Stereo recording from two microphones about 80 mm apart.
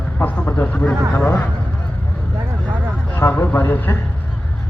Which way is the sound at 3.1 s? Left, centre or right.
Left.